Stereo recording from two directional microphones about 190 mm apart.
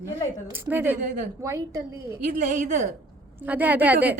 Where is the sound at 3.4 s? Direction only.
10° right (ahead or behind).